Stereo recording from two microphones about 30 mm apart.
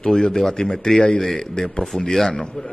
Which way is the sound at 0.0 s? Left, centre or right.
Left.